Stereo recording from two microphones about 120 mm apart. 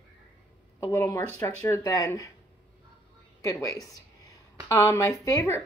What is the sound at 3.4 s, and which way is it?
Speech, 30° left (ahead or behind).